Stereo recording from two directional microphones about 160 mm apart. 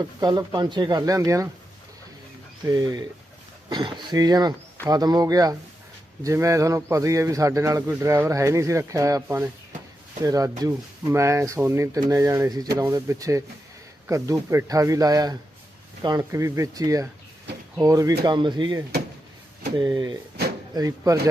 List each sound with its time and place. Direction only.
0.0 s a man's voice: 25° right (ahead or behind)
2.6 s a man's voice: 25° right (ahead or behind)
19.8 s a man's voice: 20° right (ahead or behind)